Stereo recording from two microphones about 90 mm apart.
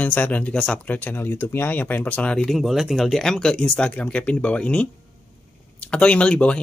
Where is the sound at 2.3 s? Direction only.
Centre (ahead or behind).